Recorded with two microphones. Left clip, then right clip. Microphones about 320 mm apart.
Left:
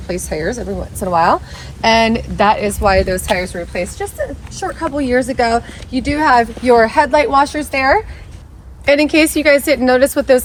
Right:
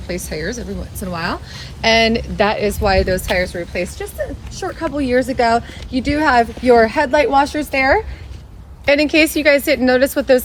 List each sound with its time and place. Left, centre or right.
0.1 s speech: centre